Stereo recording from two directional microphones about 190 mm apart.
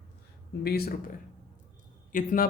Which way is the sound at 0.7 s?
55° left (ahead or behind).